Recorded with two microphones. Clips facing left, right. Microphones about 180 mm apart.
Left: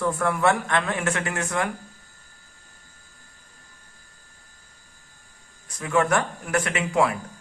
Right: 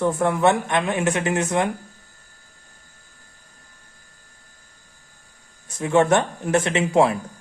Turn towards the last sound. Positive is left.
turn(degrees=-25)  # may be behind; listen again after turning